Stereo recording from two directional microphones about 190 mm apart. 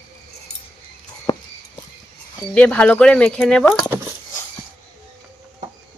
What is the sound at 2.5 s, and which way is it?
Speech, 5° left (ahead or behind).